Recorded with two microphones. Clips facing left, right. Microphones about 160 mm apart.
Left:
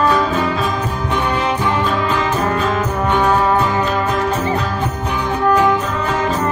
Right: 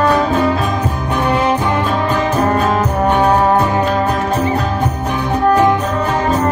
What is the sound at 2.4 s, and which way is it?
Music, 50° right (ahead or behind).